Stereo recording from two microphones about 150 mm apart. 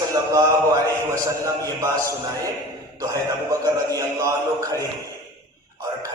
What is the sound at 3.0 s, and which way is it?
A man's voice, 25° right (ahead or behind).